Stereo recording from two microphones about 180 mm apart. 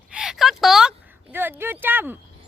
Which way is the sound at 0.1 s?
5° right (ahead or behind).